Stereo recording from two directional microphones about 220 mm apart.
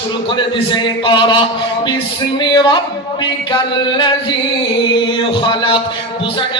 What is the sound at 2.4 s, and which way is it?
Speech, 20° left (ahead or behind).